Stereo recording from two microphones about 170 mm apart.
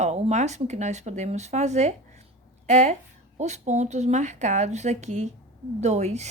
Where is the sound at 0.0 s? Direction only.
40° right (ahead or behind).